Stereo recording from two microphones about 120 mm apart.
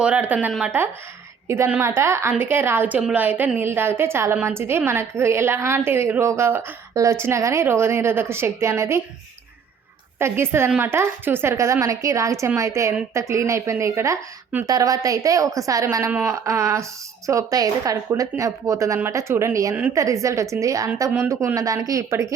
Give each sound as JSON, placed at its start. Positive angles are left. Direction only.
{"t": 0.0, "sound": "a woman's voice", "side_deg": -10}
{"t": 10.2, "sound": "a woman's voice", "side_deg": -20}